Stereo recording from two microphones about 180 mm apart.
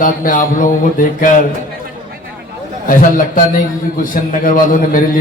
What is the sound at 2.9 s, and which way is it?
A man's voice, 50° left (ahead or behind).